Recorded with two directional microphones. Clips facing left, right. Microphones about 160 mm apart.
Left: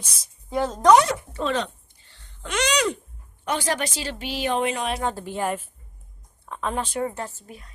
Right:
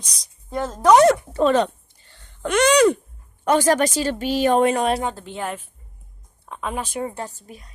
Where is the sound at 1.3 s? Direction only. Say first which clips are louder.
Right 8 dB; 45° right (ahead or behind).